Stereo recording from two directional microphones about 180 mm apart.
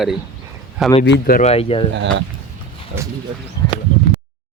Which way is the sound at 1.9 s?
80° right.